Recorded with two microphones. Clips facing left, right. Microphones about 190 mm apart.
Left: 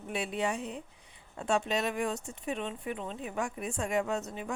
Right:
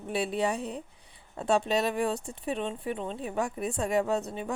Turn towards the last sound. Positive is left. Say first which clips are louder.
# right 4 dB
turn(degrees=-35)  # may be behind; listen again after turning